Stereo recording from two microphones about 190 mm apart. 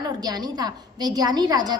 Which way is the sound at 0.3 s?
20° right (ahead or behind).